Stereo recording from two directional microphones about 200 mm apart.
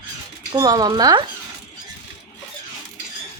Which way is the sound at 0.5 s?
20° right (ahead or behind).